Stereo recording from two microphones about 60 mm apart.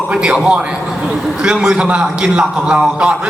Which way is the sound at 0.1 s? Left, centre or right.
Centre.